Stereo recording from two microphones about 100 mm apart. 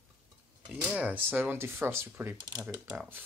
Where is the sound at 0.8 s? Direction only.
15° right (ahead or behind).